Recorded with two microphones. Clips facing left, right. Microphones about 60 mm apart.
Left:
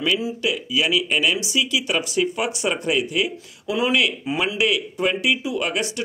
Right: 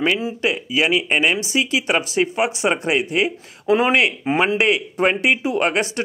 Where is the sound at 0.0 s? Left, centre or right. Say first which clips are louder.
Right 3 dB; right.